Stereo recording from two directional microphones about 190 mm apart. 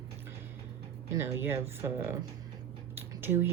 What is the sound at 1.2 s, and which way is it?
Speech, 15° right (ahead or behind).